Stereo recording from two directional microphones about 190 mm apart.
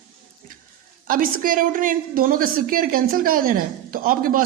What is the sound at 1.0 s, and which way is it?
A woman's voice, 45° right (ahead or behind).